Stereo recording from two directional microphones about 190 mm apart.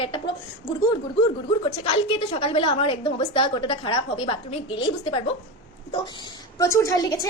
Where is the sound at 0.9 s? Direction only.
25° left (ahead or behind).